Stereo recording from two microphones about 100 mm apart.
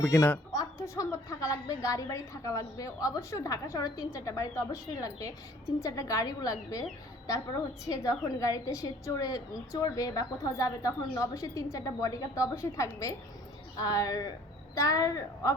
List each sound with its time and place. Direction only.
0.0 s a woman's voice: 30° left (ahead or behind)